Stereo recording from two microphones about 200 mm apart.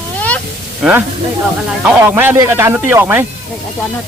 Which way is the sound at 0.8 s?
5° right (ahead or behind).